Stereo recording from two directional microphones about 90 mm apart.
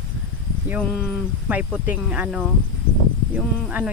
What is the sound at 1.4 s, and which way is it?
Speech, 15° right (ahead or behind).